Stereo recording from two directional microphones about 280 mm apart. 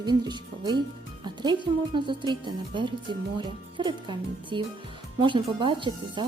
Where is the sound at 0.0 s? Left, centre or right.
Centre.